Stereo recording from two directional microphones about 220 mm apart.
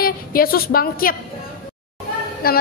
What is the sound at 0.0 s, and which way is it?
A woman's voice, 40° left (ahead or behind).